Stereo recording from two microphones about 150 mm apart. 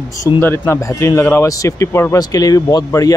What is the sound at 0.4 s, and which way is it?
Speech, 15° left (ahead or behind).